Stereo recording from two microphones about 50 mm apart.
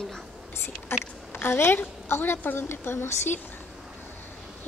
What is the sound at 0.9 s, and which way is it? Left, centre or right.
A woman's voice, left.